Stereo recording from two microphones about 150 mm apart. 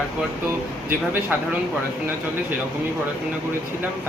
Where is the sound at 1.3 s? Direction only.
10° right (ahead or behind).